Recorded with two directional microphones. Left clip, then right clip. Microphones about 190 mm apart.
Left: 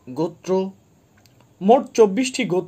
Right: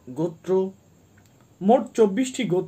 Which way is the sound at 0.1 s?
25° left (ahead or behind).